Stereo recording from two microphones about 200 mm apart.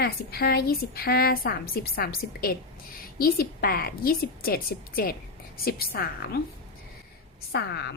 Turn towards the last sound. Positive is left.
turn(degrees=55)  # may be behind; listen again after turning